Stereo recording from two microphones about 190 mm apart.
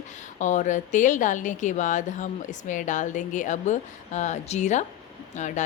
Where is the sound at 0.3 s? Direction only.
40° left (ahead or behind).